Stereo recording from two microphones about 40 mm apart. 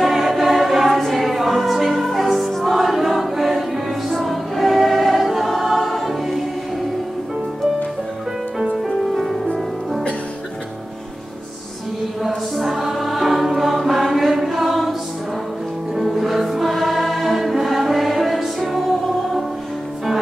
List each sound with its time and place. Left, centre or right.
0.0 s choir: centre
8.7 s music: centre
12.5 s music: centre